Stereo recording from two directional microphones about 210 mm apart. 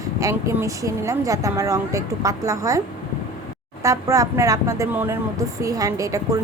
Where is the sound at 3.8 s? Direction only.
15° right (ahead or behind).